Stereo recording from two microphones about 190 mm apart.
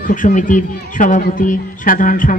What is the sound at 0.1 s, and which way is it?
A man's voice, 45° left (ahead or behind).